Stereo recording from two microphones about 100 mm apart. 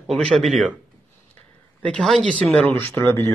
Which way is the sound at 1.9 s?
5° left (ahead or behind).